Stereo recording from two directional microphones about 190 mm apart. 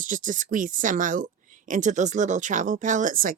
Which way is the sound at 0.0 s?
45° right (ahead or behind).